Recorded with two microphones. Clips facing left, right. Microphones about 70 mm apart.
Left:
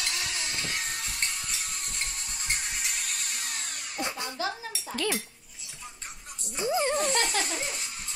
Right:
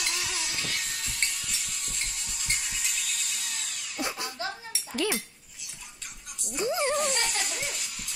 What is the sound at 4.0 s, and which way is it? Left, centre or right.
Music, centre.